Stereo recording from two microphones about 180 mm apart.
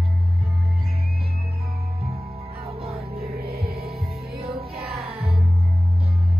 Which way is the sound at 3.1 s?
60° right (ahead or behind).